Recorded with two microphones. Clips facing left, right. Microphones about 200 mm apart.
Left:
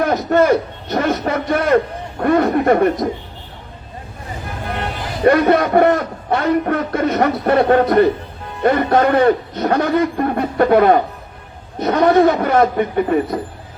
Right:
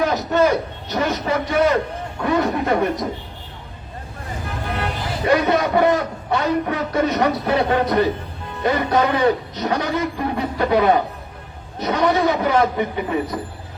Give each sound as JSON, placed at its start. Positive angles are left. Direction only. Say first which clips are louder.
{"t": 0.0, "sound": "a man's voice", "louder": "left 3 dB", "side_deg": 55}
{"t": 5.2, "sound": "a man's voice", "louder": "left 5 dB", "side_deg": 55}